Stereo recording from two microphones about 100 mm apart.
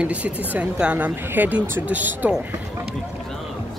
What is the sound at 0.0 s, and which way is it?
A woman's voice, 15° right (ahead or behind).